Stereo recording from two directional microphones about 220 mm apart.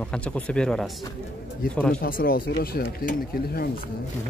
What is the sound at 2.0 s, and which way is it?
Speech, 40° left (ahead or behind).